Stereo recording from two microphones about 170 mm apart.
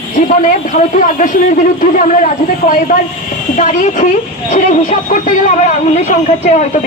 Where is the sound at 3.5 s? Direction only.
50° left (ahead or behind).